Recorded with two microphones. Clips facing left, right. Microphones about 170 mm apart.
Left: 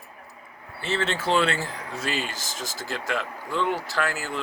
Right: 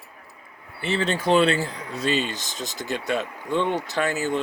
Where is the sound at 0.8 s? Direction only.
15° right (ahead or behind).